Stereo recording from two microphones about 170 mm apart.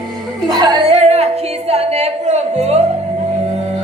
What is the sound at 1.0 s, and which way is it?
Music, 40° right (ahead or behind).